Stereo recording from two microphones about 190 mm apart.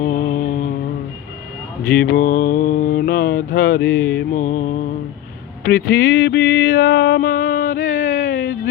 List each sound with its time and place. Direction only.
0.0 s mantra: 45° left (ahead or behind)
2.0 s mantra: 50° left (ahead or behind)
3.8 s mantra: 10° left (ahead or behind)
4.4 s mantra: 45° left (ahead or behind)
5.6 s a sound: 55° left (ahead or behind)